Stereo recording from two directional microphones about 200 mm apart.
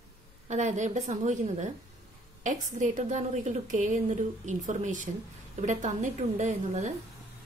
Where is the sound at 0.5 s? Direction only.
35° right (ahead or behind).